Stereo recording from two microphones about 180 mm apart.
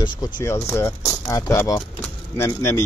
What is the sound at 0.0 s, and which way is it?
Speech, 20° left (ahead or behind).